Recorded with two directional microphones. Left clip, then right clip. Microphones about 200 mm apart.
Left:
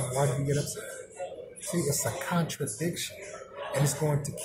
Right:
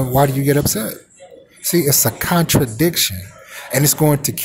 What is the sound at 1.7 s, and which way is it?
Speech, 45° right (ahead or behind).